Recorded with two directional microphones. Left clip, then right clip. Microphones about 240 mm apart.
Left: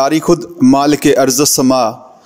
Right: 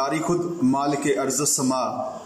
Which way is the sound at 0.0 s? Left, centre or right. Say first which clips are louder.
Left 11 dB; left.